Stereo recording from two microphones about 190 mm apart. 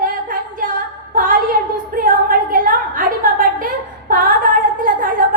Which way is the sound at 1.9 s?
45° right (ahead or behind).